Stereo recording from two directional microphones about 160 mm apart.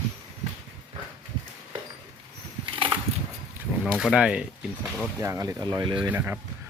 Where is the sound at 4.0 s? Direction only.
5° right (ahead or behind).